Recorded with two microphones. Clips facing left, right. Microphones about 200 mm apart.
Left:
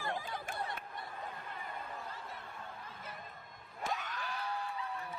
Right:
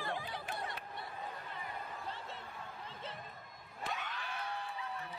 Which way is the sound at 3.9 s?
45° left (ahead or behind).